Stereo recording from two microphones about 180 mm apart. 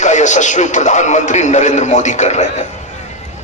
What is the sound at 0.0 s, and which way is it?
A man's voice, 40° left (ahead or behind).